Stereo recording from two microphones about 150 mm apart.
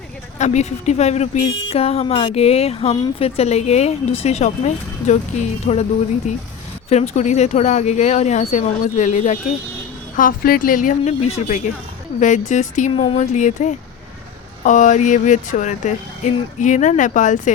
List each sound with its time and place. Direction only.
0.3 s speech: 50° left (ahead or behind)
6.9 s speech: 45° left (ahead or behind)
10.2 s speech: 70° left (ahead or behind)